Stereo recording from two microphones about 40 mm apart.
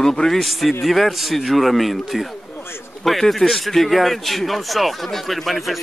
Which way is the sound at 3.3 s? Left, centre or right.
Centre.